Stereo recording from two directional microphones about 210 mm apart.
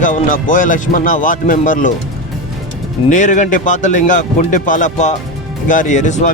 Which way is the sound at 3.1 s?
35° left (ahead or behind).